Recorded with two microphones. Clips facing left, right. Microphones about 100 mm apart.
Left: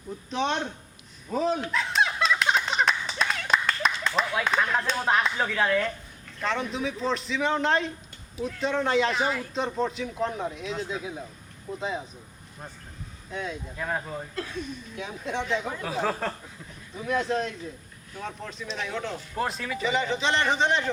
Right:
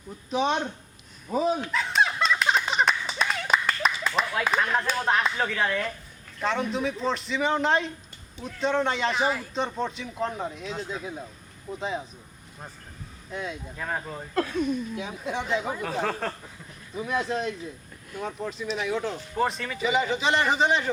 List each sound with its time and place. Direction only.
0.3 s speech: 5° right (ahead or behind)
1.3 s a sound: 5° right (ahead or behind)
6.4 s a man's voice: centre (ahead or behind)
13.3 s a man's voice: centre (ahead or behind)
14.3 s speech: 50° right (ahead or behind)
14.9 s a man's voice: 5° right (ahead or behind)